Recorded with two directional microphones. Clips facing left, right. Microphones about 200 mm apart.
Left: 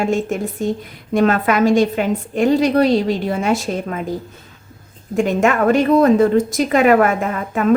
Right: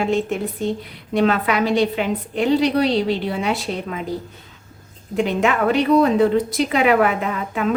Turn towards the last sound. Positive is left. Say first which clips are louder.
# left 3 dB
turn(degrees=45)  # may be behind; listen again after turning